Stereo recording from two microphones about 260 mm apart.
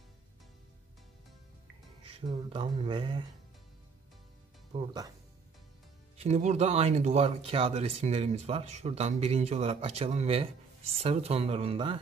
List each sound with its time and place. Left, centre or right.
2.0 s speech: centre
4.7 s speech: centre
6.1 s speech: right